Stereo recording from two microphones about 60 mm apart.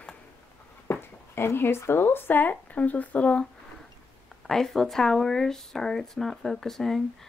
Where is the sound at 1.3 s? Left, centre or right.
Left.